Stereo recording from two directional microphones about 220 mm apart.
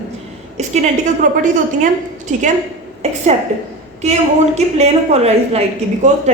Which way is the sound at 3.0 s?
30° right (ahead or behind).